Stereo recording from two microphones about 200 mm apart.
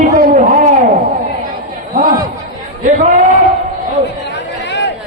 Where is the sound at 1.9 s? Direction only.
45° right (ahead or behind).